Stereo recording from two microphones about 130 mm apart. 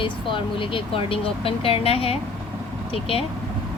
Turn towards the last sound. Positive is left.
turn(degrees=45)  # may be behind; listen again after turning